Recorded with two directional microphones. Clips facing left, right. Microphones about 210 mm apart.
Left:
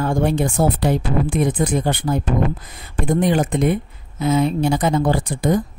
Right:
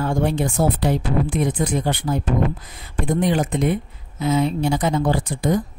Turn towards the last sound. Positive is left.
turn(degrees=50)  # may be behind; listen again after turning